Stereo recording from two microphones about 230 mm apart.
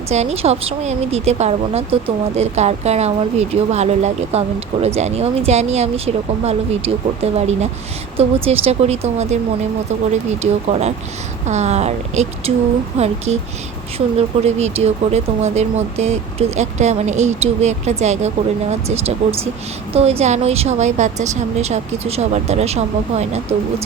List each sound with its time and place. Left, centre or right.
0.1 s speech: right